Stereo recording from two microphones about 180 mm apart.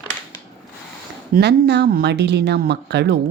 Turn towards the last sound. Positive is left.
turn(degrees=-65)  # may be behind; listen again after turning